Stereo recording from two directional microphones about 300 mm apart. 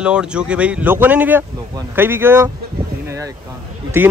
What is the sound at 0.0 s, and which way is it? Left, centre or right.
Speech, centre.